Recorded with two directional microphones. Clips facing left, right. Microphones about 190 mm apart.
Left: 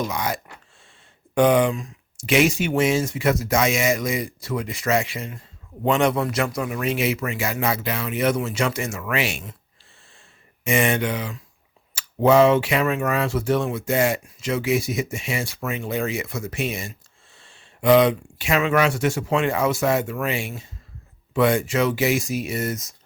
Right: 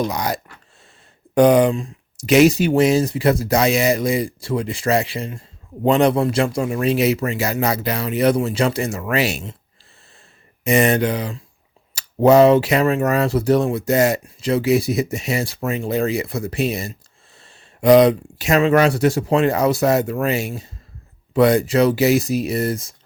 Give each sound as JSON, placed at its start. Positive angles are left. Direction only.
{"t": 0.0, "sound": "speech", "side_deg": -40}
{"t": 1.4, "sound": "speech", "side_deg": -40}
{"t": 10.6, "sound": "speech", "side_deg": -40}